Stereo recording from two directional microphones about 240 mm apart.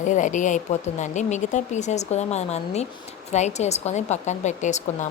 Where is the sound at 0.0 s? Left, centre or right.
Left.